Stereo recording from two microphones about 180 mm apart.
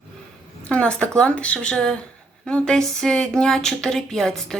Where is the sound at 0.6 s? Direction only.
5° left (ahead or behind).